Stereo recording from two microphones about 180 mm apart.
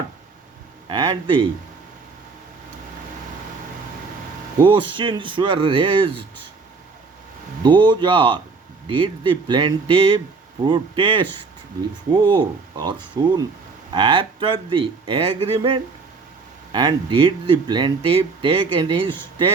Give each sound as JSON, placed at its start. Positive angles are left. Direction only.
{"t": 0.9, "sound": "speech", "side_deg": -30}
{"t": 4.6, "sound": "speech", "side_deg": -30}
{"t": 7.6, "sound": "speech", "side_deg": -25}